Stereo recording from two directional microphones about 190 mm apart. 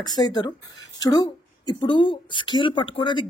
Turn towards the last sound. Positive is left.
turn(degrees=25)  # may be behind; listen again after turning